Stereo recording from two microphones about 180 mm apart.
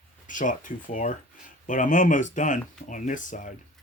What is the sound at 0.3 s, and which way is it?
Speech, 45° left (ahead or behind).